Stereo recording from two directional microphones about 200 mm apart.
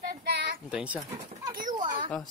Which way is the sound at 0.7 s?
5° right (ahead or behind).